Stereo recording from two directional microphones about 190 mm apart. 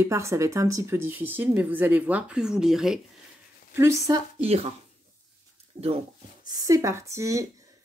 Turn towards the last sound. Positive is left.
turn(degrees=-15)  # may be behind; listen again after turning